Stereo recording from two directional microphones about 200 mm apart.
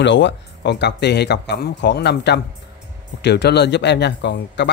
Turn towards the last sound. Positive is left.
turn(degrees=60)  # may be behind; listen again after turning